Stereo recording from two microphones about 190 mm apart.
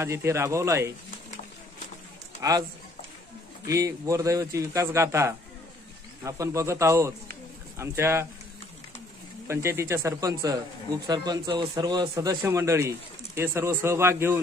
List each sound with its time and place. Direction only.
0.0 s a man's voice: 15° right (ahead or behind)
2.4 s a man's voice: 15° right (ahead or behind)
3.6 s a man's voice: 15° right (ahead or behind)
9.5 s a man's voice: 15° right (ahead or behind)